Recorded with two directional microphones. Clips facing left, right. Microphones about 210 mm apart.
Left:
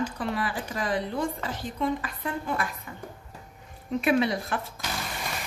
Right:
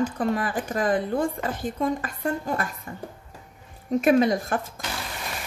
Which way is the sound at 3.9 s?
45° right (ahead or behind).